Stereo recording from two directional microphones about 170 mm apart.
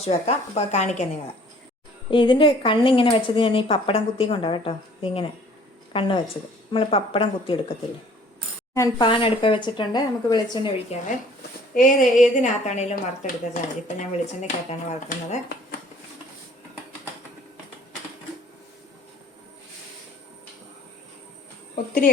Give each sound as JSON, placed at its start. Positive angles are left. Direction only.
{"t": 0.0, "sound": "a woman's voice", "side_deg": 40}
{"t": 2.0, "sound": "a woman's voice", "side_deg": 30}
{"t": 8.7, "sound": "speech", "side_deg": 15}
{"t": 9.0, "sound": "speech", "side_deg": 30}
{"t": 10.9, "sound": "a woman's voice", "side_deg": 40}
{"t": 11.7, "sound": "a woman's voice", "side_deg": 50}